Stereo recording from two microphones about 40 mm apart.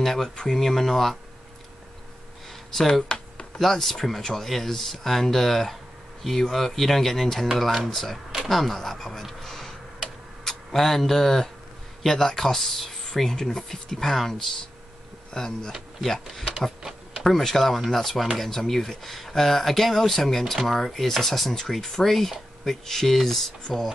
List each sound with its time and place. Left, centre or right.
0.0 s a sound: centre
0.6 s speech: centre
3.1 s music: left
3.5 s speech: centre
8.5 s computer keyboard: centre
10.7 s speech: centre
15.3 s speech: centre
16.0 s speech: centre